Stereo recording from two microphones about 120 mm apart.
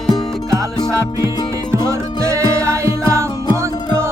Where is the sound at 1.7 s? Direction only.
25° right (ahead or behind).